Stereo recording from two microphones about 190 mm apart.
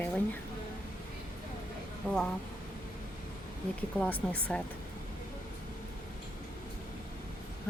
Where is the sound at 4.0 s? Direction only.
5° left (ahead or behind).